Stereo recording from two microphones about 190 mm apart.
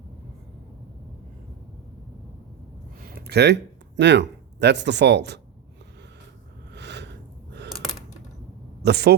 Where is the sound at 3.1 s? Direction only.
60° right (ahead or behind).